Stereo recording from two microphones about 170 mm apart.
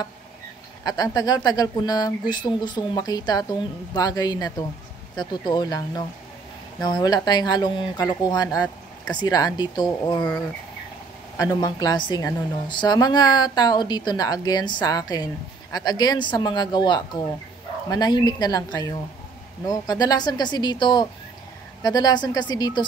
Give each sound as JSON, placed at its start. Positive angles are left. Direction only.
{"t": 0.8, "sound": "a woman's voice", "side_deg": 20}
{"t": 11.3, "sound": "a woman's voice", "side_deg": 20}